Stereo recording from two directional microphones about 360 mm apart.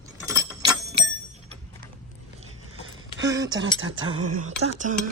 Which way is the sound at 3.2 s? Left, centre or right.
Centre.